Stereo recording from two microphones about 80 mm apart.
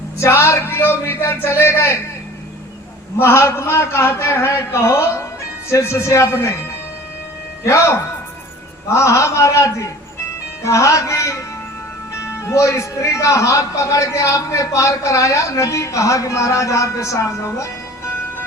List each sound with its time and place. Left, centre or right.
0.2 s a man's voice: left
3.2 s a man's voice: left
7.6 s a man's voice: left